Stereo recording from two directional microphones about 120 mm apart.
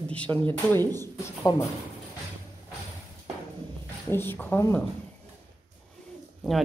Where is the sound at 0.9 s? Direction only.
20° left (ahead or behind).